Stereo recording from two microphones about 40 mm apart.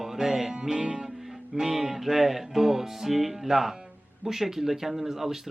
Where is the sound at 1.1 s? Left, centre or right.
Centre.